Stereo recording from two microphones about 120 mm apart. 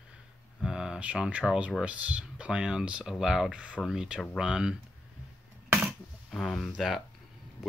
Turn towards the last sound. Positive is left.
turn(degrees=0)  # may be behind; listen again after turning